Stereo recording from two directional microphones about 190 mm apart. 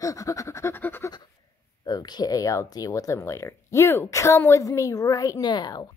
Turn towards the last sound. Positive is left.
turn(degrees=20)  # may be behind; listen again after turning